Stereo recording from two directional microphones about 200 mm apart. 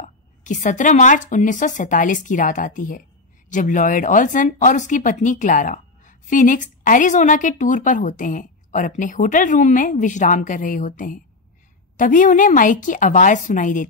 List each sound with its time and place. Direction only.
0.0 s speech: 40° left (ahead or behind)